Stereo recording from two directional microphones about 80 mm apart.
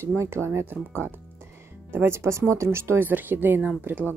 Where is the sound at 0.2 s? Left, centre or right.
Right.